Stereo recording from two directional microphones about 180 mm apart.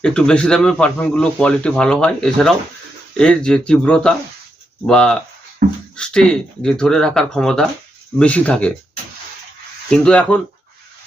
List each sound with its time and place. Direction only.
0.0 s speech: 5° left (ahead or behind)
5.6 s speech: 55° right (ahead or behind)
6.0 s speech: 5° left (ahead or behind)
9.9 s speech: 5° left (ahead or behind)